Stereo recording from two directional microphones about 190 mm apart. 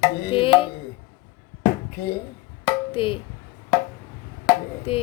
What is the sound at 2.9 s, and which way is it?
Speech, 30° left (ahead or behind).